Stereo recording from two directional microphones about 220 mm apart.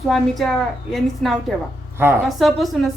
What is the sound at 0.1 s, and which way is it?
Speech, centre (ahead or behind).